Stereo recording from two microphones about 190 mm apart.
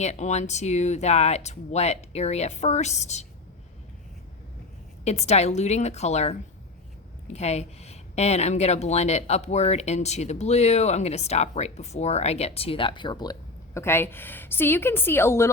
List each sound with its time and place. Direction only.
0.0 s speech: 35° left (ahead or behind)
5.0 s speech: 35° left (ahead or behind)
7.3 s speech: 35° left (ahead or behind)
13.7 s a woman's voice: 15° left (ahead or behind)